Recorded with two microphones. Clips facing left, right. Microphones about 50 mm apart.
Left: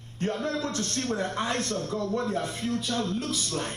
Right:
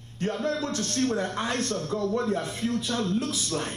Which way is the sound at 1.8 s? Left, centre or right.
Right.